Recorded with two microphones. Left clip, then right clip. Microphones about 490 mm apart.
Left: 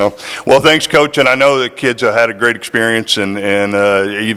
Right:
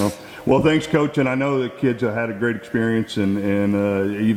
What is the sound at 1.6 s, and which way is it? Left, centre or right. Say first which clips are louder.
A man's voice: left 8 dB; centre.